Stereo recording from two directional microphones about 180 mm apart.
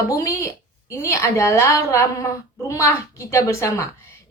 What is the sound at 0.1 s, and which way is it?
A woman's voice, 15° left (ahead or behind).